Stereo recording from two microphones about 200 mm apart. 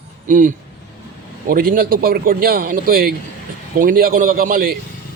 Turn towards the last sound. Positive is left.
turn(degrees=-45)  # may be behind; listen again after turning